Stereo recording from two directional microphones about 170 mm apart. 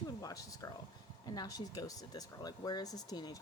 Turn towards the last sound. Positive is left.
turn(degrees=25)  # may be behind; listen again after turning